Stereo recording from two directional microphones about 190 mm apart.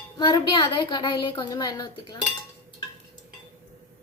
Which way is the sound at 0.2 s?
25° left (ahead or behind).